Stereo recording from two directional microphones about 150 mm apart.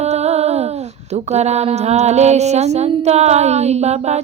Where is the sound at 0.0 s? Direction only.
45° right (ahead or behind).